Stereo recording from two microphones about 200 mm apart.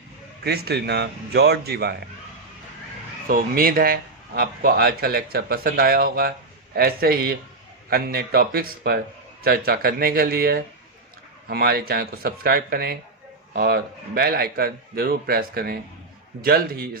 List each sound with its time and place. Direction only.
0.4 s a man's voice: 55° right (ahead or behind)
3.2 s speech: 45° right (ahead or behind)